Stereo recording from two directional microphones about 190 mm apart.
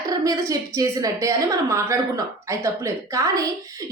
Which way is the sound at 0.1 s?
20° right (ahead or behind).